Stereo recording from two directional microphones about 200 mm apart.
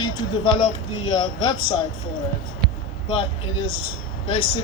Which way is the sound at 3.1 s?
25° left (ahead or behind).